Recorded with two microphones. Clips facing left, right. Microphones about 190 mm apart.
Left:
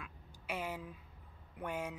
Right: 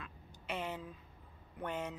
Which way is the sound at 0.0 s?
10° left (ahead or behind).